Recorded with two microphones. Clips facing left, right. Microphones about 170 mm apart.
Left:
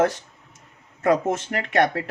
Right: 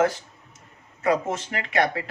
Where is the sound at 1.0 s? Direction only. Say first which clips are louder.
Left 3 dB; 50° left (ahead or behind).